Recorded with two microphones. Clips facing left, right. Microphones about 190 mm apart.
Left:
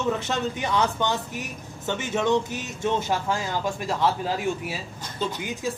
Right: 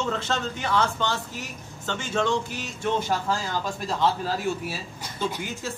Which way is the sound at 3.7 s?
15° left (ahead or behind).